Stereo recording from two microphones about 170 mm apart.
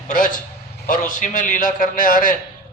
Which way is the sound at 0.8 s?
50° left (ahead or behind).